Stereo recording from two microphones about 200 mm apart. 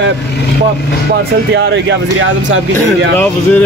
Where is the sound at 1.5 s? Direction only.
60° right (ahead or behind).